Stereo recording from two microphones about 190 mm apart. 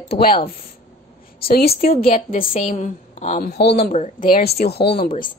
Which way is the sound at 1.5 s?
50° left (ahead or behind).